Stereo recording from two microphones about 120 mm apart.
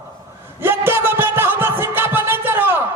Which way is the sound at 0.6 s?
20° right (ahead or behind).